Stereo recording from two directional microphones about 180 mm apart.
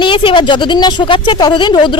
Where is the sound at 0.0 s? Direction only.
30° left (ahead or behind).